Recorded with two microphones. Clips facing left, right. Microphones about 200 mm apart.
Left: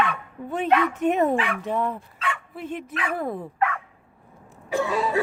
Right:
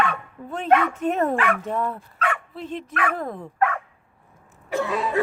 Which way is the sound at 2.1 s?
55° right (ahead or behind).